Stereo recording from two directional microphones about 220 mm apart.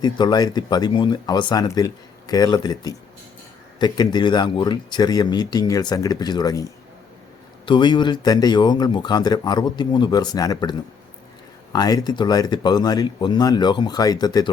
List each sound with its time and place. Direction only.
0.0 s speech: 20° left (ahead or behind)